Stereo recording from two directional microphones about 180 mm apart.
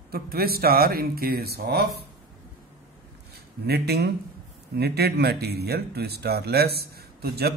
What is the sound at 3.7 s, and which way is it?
Speech, 65° right (ahead or behind).